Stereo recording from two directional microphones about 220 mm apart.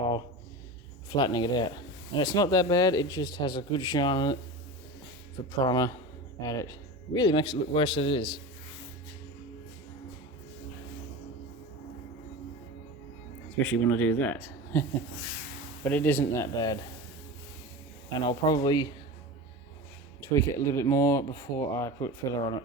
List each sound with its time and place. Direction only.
1.1 s a man's voice: 20° left (ahead or behind)
5.5 s a man's voice: 15° left (ahead or behind)
13.6 s speech: 10° left (ahead or behind)
18.1 s a man's voice: 20° left (ahead or behind)
20.2 s speech: 15° left (ahead or behind)